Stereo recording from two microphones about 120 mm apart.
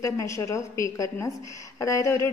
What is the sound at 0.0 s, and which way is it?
A woman's voice, 25° left (ahead or behind).